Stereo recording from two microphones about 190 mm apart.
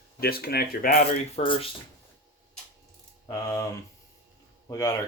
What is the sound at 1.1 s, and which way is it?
Speech, 30° left (ahead or behind).